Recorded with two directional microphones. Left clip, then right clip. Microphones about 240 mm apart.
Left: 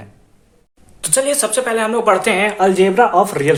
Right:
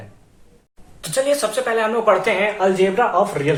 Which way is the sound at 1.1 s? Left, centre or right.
Left.